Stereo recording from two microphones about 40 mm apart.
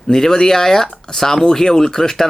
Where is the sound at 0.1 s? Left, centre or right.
Centre.